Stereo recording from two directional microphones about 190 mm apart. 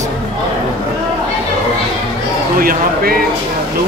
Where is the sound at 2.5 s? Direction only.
50° right (ahead or behind).